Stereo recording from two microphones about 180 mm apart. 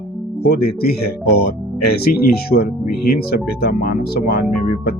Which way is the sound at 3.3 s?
55° left (ahead or behind).